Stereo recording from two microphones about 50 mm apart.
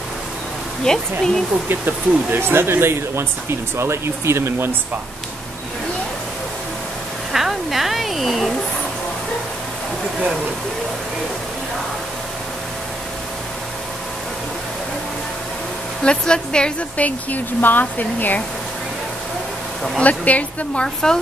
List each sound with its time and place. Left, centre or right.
0.8 s speech: centre
1.7 s speech: right
7.3 s a sound: centre
16.0 s speech: centre
16.9 s speech: left
20.0 s a woman's voice: left
20.8 s speech: centre